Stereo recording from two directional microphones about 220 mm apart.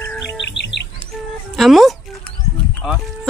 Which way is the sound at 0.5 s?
50° left (ahead or behind).